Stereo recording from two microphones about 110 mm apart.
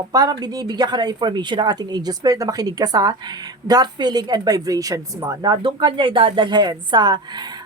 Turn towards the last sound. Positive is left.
turn(degrees=-40)  # may be behind; listen again after turning